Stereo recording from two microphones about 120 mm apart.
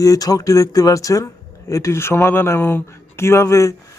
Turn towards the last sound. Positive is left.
turn(degrees=25)  # may be behind; listen again after turning